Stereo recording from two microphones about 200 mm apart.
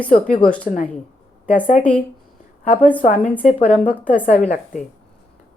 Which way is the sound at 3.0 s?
40° left (ahead or behind).